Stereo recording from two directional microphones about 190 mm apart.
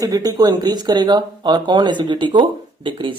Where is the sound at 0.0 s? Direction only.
20° right (ahead or behind).